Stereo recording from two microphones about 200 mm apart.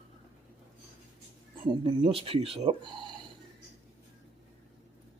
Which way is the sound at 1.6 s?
25° right (ahead or behind).